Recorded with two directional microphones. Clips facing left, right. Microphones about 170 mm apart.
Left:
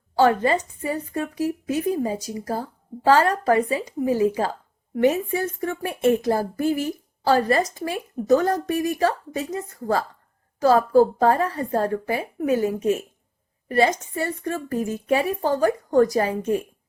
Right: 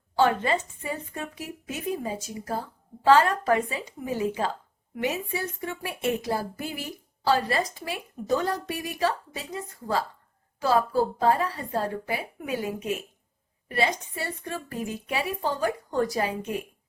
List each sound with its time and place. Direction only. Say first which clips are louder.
0.2 s speech: left 5 dB; 40° left (ahead or behind)
4.9 s a woman's voice: left 9 dB; 50° left (ahead or behind)